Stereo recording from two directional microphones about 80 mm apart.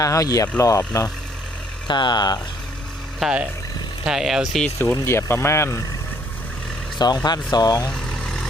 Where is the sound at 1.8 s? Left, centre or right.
Left.